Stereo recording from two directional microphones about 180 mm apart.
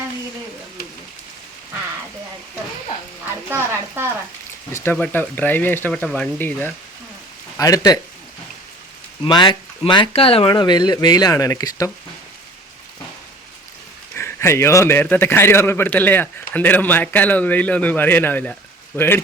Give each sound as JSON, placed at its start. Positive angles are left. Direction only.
{"t": 3.5, "sound": "a sound", "side_deg": -10}
{"t": 4.7, "sound": "a man's voice", "side_deg": 10}
{"t": 9.2, "sound": "speech", "side_deg": 25}
{"t": 14.2, "sound": "a man's voice", "side_deg": 15}